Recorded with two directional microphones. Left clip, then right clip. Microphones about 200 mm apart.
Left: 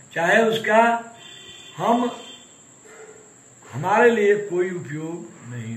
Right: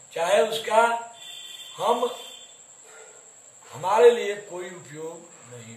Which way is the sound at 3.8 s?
20° right (ahead or behind).